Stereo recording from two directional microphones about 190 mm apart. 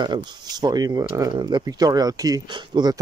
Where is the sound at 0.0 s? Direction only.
25° right (ahead or behind).